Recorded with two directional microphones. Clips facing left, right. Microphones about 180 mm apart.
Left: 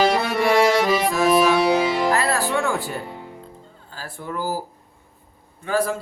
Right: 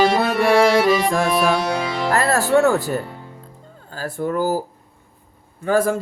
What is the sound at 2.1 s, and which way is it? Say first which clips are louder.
Music: right 5 dB; 45° right (ahead or behind).